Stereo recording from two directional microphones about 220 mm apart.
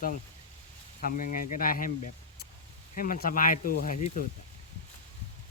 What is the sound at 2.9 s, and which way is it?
Speech, 40° left (ahead or behind).